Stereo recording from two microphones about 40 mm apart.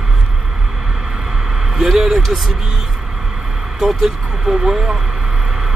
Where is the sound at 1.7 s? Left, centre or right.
Centre.